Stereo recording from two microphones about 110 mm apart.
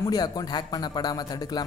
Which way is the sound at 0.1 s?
40° left (ahead or behind).